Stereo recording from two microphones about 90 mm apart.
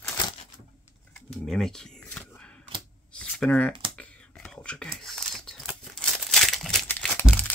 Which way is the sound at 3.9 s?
15° left (ahead or behind).